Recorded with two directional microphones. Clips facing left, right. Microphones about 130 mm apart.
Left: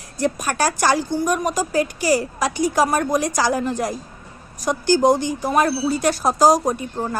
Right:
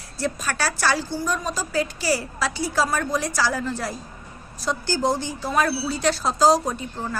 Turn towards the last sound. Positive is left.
turn(degrees=25)  # may be behind; listen again after turning